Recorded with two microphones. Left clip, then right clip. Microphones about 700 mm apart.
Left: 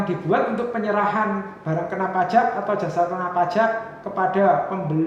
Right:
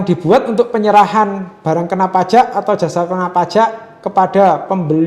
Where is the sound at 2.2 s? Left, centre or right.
Right.